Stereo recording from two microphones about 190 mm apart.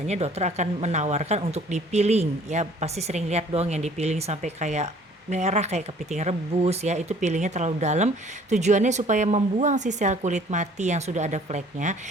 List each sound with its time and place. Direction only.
0.1 s speech: 35° right (ahead or behind)